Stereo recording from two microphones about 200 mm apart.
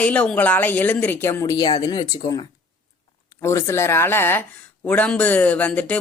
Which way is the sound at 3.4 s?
15° left (ahead or behind).